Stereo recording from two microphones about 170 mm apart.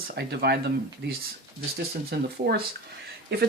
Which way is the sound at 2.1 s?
65° right (ahead or behind).